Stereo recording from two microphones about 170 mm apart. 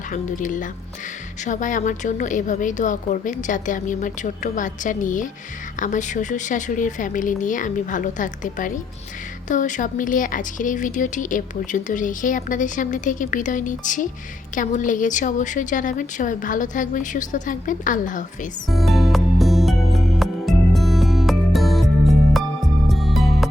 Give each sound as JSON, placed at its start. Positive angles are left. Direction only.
{"t": 0.1, "sound": "speech", "side_deg": 50}
{"t": 18.7, "sound": "music", "side_deg": 0}